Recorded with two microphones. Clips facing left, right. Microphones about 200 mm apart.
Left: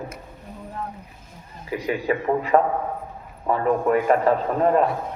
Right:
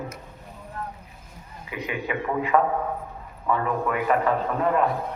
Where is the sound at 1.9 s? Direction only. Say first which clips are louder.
Left 6 dB; 35° left (ahead or behind).